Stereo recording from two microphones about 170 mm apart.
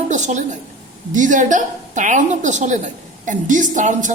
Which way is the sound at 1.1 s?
50° right (ahead or behind).